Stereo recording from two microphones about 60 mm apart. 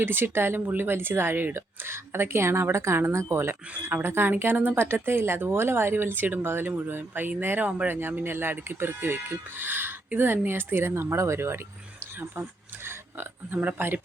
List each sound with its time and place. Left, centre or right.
0.0 s speech: right
12.4 s speech: right